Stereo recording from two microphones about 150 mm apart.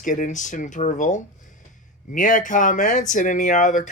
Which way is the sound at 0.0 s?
60° left (ahead or behind).